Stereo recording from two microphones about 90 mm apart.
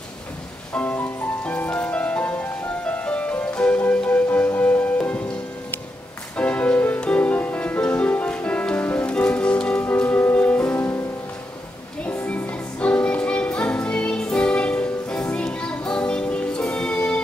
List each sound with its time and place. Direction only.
0.7 s music: 20° left (ahead or behind)
6.3 s music: 15° left (ahead or behind)
12.2 s music: 20° left (ahead or behind)